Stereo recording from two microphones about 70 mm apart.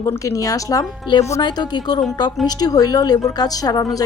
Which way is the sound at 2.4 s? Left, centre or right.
Left.